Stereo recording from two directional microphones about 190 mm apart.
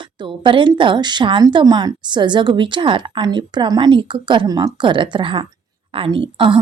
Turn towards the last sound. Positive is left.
turn(degrees=-25)  # may be behind; listen again after turning